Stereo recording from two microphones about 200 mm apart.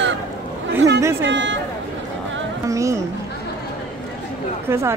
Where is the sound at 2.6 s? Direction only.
15° right (ahead or behind).